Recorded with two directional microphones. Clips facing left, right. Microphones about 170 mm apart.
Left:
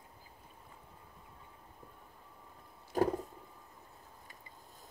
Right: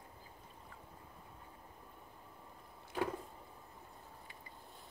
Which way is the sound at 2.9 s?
40° left (ahead or behind).